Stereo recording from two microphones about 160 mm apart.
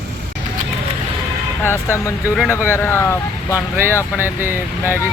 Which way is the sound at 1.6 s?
15° left (ahead or behind).